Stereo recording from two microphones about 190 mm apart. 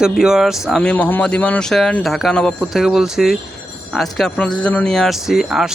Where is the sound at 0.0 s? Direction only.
5° right (ahead or behind).